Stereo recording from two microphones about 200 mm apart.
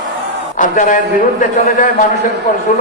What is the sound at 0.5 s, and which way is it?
A man's voice, 40° left (ahead or behind).